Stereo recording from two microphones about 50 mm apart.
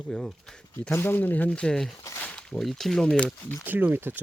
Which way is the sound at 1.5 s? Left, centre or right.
Centre.